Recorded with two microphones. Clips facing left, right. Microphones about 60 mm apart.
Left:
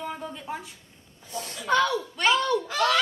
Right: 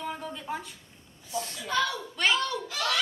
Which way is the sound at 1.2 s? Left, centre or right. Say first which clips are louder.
Left 6 dB; left.